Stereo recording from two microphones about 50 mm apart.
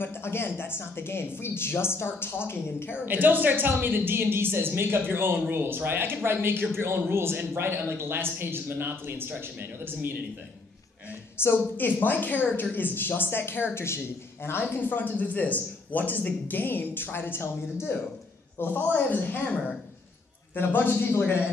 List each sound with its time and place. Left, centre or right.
0.0 s speech: left
3.1 s a man's voice: right
11.4 s speech: left
11.7 s speech: left
14.6 s speech: left
18.9 s speech: left
20.5 s speech: left